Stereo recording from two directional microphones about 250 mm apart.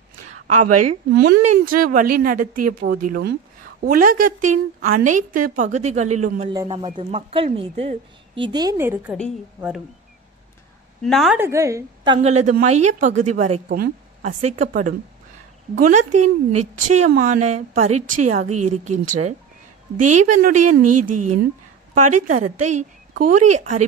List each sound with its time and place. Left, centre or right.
0.7 s a sound: right
1.1 s a woman's voice: right
6.5 s a man's voice: centre
11.1 s a woman's voice: centre; by 20.7 s right
20.8 s a sound: right
21.9 s a woman's voice: right